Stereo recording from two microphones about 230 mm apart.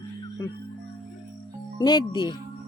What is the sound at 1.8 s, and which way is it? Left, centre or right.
Speech, centre.